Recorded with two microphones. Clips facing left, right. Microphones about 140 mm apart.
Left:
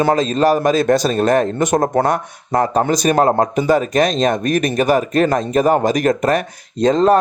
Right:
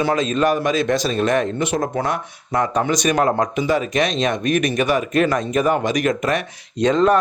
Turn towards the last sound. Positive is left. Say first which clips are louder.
# left 3 dB
turn(degrees=35)  # may be behind; listen again after turning